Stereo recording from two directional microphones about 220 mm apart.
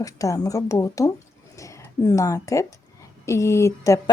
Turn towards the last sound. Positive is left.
turn(degrees=15)  # may be behind; listen again after turning